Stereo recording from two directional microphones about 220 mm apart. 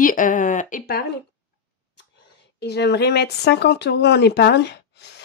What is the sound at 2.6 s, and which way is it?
Speech, 50° left (ahead or behind).